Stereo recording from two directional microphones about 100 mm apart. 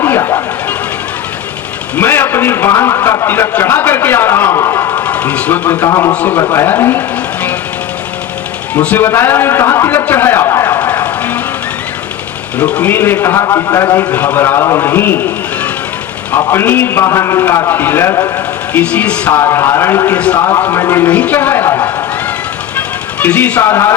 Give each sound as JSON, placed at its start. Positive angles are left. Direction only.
{"t": 0.0, "sound": "a sound", "side_deg": 25}
{"t": 2.0, "sound": "a man's voice", "side_deg": 20}
{"t": 4.9, "sound": "speech", "side_deg": 15}
{"t": 5.9, "sound": "a man's voice", "side_deg": 35}
{"t": 6.1, "sound": "a man's voice", "side_deg": 20}
{"t": 8.7, "sound": "a man's voice", "side_deg": 15}
{"t": 10.7, "sound": "music", "side_deg": 15}
{"t": 12.5, "sound": "a man's voice", "side_deg": 10}
{"t": 14.1, "sound": "a man's voice", "side_deg": 15}
{"t": 19.4, "sound": "a man's voice", "side_deg": 25}
{"t": 20.1, "sound": "speech", "side_deg": 10}
{"t": 20.7, "sound": "a man's voice", "side_deg": 30}
{"t": 23.2, "sound": "a man's voice", "side_deg": 15}